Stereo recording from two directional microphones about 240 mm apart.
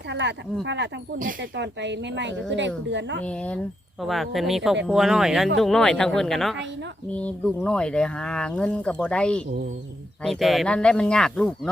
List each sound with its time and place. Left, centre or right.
0.1 s speech: right
3.2 s speech: centre